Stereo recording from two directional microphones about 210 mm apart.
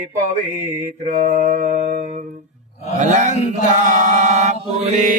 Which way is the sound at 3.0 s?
35° right (ahead or behind).